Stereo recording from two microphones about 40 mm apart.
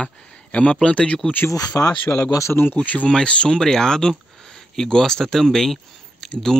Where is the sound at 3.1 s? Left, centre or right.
Left.